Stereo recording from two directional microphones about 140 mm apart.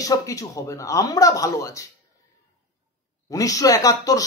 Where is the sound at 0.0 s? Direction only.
25° left (ahead or behind).